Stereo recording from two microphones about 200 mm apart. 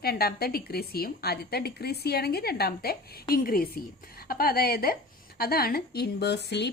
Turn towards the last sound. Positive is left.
turn(degrees=55)  # may be behind; listen again after turning